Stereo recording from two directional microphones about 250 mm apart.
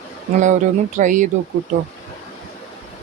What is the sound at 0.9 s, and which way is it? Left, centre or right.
Speech, right.